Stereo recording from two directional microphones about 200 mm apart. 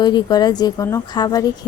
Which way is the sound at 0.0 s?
20° left (ahead or behind).